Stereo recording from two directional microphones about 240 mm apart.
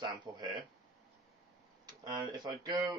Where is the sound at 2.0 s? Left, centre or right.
Centre.